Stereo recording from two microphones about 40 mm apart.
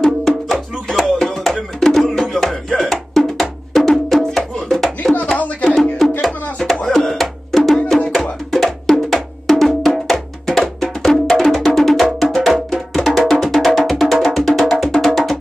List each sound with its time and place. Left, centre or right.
0.0 s music: centre
4.6 s a sound: centre
5.2 s music: left
5.8 s music: centre